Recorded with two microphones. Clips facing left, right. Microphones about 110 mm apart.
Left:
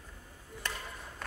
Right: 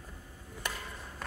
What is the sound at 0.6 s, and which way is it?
Chop, 10° right (ahead or behind).